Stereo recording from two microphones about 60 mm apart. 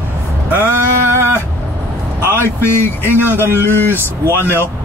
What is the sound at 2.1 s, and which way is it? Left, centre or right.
Speech, left.